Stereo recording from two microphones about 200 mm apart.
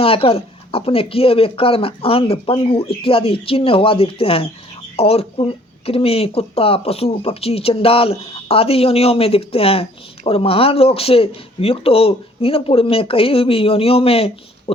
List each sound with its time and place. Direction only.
0.0 s speech: 30° left (ahead or behind)